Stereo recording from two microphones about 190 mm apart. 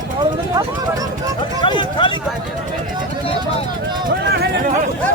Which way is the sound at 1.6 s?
25° left (ahead or behind).